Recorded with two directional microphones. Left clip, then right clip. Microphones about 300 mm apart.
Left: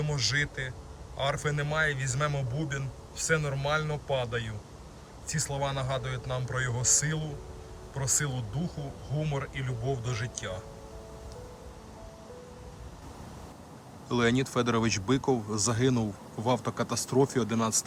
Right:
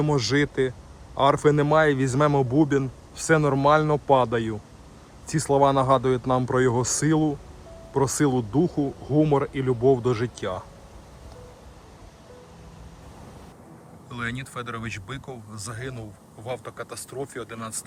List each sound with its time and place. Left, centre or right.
0.0 s a man's voice: centre
14.1 s speech: centre